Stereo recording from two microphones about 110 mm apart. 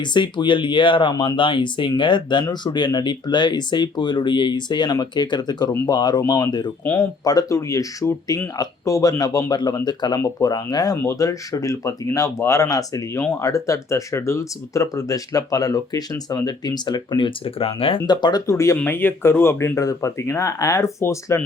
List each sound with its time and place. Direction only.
0.0 s speech: 45° left (ahead or behind)
1.1 s speech: 35° left (ahead or behind)
1.4 s speech: 50° left (ahead or behind)
6.8 s speech: 25° left (ahead or behind)
10.9 s speech: 25° left (ahead or behind); by 18.0 s 60° left (ahead or behind)
18.0 s speech: 40° left (ahead or behind); by 21.4 s 25° left (ahead or behind)